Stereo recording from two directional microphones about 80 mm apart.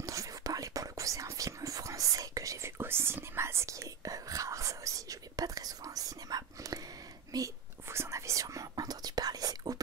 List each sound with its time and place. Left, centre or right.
0.0 s whispering: right
2.8 s whispering: right